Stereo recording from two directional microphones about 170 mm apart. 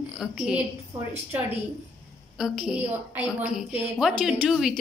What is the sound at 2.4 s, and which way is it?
A woman's voice, 5° right (ahead or behind).